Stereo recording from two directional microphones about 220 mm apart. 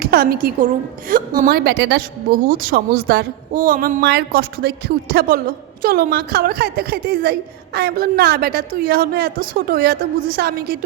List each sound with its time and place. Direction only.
0.0 s a woman's voice: 45° right (ahead or behind)